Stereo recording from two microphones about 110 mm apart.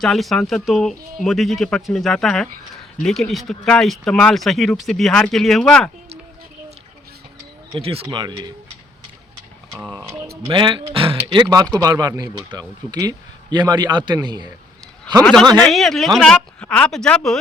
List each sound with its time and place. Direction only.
0.0 s speech: centre (ahead or behind)
7.8 s speech: 60° right (ahead or behind)
8.1 s speech: 45° right (ahead or behind)
9.9 s speech: 20° right (ahead or behind)
10.5 s speech: 50° right (ahead or behind)
11.4 s a man's voice: 30° right (ahead or behind)
15.6 s speech: centre (ahead or behind)